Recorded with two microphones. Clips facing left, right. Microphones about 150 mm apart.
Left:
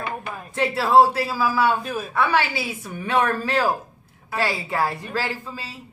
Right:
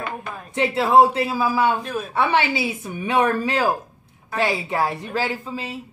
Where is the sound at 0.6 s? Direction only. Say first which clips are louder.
Right 1 dB; 20° right (ahead or behind).